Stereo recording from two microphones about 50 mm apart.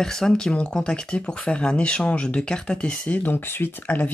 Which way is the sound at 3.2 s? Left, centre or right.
Left.